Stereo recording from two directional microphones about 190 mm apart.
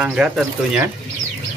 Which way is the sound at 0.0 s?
5° right (ahead or behind).